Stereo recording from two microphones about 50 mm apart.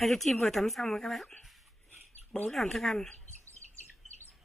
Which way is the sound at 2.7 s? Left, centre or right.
Centre.